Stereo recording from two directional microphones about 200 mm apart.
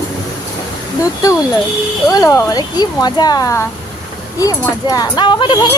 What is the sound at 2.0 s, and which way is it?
Speech, 15° left (ahead or behind).